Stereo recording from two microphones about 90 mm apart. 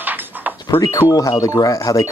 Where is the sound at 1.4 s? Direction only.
40° left (ahead or behind).